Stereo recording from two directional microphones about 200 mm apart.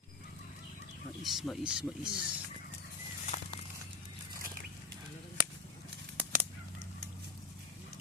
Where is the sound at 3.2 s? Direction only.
35° left (ahead or behind).